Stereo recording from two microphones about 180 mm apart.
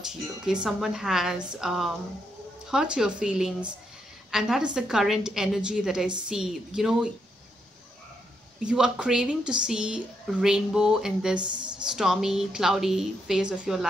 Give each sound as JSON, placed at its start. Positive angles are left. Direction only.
{"t": 0.0, "sound": "a woman's voice", "side_deg": -5}
{"t": 8.6, "sound": "a woman's voice", "side_deg": -5}
{"t": 11.3, "sound": "speech", "side_deg": -25}
{"t": 11.9, "sound": "a woman's voice", "side_deg": 0}